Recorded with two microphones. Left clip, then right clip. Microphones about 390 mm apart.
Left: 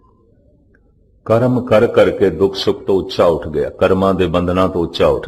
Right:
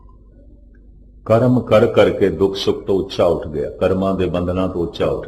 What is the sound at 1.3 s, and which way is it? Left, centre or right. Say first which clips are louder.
A man's voice: left 1 dB; centre.